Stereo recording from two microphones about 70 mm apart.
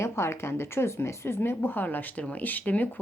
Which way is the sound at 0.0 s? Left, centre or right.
Left.